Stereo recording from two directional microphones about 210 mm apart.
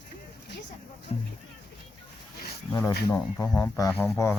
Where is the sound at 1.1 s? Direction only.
30° left (ahead or behind).